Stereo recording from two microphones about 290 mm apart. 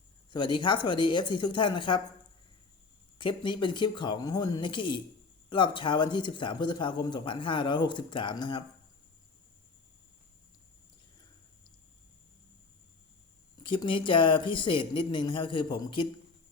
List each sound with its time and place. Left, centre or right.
0.3 s speech: centre
3.2 s speech: centre
13.6 s speech: centre